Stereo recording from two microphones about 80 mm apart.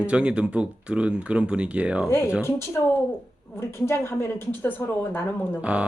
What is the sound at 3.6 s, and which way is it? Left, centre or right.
A woman's voice, left.